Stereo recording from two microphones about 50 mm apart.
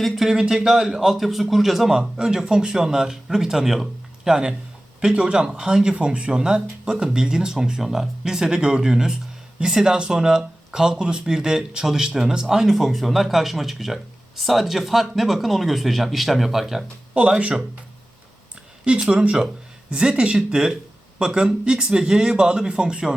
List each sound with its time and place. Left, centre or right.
0.0 s a man's voice: centre
17.2 s speech: right
18.9 s a man's voice: right